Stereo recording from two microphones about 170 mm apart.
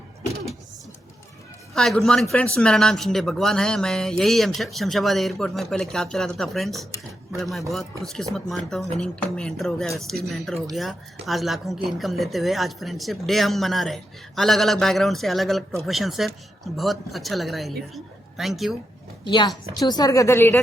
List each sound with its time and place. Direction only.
1.7 s a woman's voice: centre (ahead or behind)
19.2 s a woman's voice: 25° left (ahead or behind)